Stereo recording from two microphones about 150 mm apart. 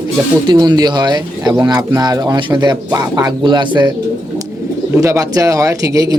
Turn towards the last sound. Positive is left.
turn(degrees=-20)  # may be behind; listen again after turning